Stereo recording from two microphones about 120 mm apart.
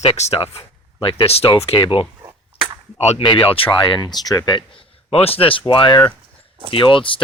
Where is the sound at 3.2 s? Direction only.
40° left (ahead or behind).